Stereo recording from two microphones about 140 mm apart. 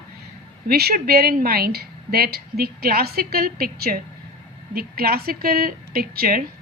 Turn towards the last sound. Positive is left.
turn(degrees=-90)